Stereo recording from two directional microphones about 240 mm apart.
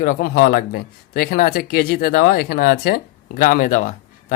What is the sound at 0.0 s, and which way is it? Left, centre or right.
Speech, left.